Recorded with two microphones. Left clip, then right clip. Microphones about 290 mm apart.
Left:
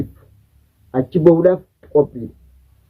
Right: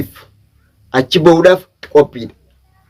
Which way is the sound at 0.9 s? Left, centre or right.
Centre.